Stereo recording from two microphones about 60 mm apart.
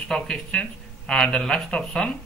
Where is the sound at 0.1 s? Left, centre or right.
Centre.